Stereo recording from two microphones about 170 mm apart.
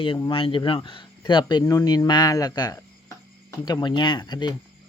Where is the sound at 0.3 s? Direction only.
30° left (ahead or behind).